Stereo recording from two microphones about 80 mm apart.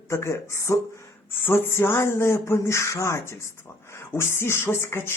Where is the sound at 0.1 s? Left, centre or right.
Left.